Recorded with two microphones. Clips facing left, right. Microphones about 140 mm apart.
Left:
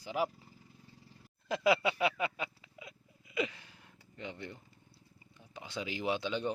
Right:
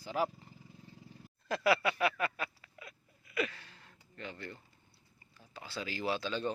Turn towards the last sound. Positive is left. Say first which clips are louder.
# left 1 dB
turn(degrees=15)  # may be behind; listen again after turning